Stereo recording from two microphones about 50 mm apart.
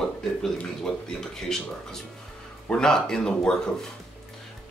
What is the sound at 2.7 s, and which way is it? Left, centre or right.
Speech, centre.